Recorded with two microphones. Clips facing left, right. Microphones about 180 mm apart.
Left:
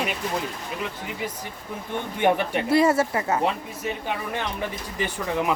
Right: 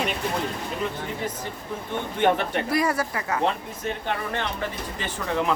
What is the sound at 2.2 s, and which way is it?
Speech, 10° left (ahead or behind).